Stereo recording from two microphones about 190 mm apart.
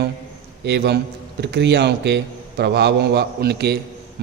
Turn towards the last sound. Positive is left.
turn(degrees=-60)  # may be behind; listen again after turning